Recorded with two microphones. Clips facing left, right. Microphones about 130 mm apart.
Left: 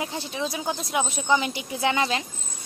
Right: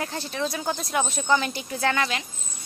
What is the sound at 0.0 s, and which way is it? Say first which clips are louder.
A woman's voice: right 1 dB; 10° left (ahead or behind).